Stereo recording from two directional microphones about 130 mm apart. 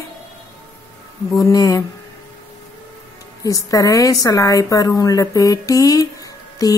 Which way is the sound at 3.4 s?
25° left (ahead or behind).